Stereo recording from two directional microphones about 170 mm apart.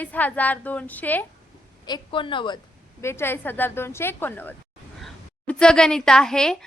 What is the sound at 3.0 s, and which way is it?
A woman's voice, 15° left (ahead or behind).